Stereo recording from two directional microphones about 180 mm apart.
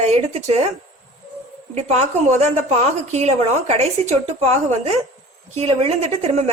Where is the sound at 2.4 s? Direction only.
40° right (ahead or behind).